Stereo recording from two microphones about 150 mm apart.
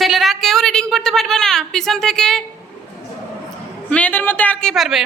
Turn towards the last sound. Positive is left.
turn(degrees=0)  # may be behind; listen again after turning